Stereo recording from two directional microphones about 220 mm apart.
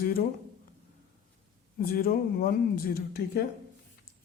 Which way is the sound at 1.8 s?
40° left (ahead or behind).